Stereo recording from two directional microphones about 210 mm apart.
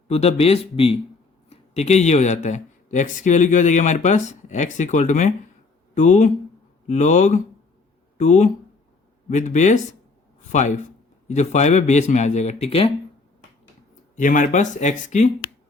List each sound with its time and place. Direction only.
0.1 s speech: 30° left (ahead or behind)
14.2 s speech: 40° left (ahead or behind)